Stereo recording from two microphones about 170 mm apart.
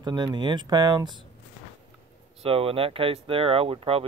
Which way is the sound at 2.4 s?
35° right (ahead or behind).